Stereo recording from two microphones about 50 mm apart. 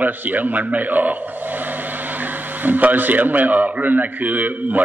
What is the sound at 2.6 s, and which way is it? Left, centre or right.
A man's voice, right.